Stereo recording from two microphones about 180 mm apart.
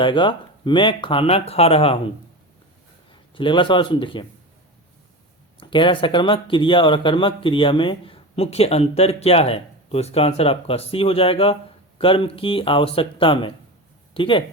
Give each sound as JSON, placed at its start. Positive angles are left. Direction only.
{"t": 0.0, "sound": "speech", "side_deg": 25}
{"t": 3.1, "sound": "a man's voice", "side_deg": 25}
{"t": 5.5, "sound": "speech", "side_deg": 25}